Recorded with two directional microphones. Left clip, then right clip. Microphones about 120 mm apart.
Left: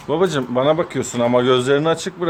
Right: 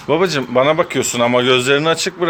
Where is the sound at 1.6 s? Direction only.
25° right (ahead or behind).